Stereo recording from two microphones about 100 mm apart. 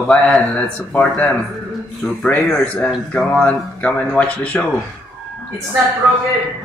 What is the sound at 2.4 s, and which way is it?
Speech, 10° left (ahead or behind).